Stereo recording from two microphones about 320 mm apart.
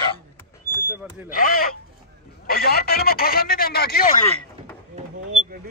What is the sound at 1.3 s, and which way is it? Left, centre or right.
Speech, left.